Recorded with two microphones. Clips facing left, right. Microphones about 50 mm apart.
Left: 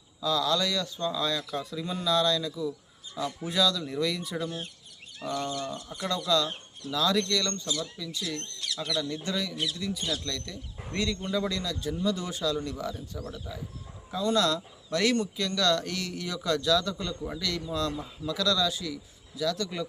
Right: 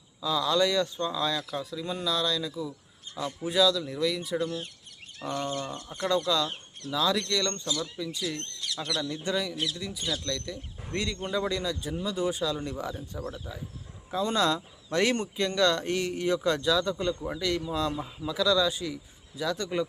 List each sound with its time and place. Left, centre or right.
0.2 s a man's voice: centre
5.5 s speech: right
6.2 s a man's voice: centre